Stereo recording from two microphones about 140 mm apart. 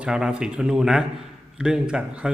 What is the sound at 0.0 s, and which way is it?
Speech, 5° right (ahead or behind).